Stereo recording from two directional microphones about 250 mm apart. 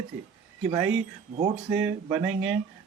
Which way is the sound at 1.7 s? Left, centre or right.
Centre.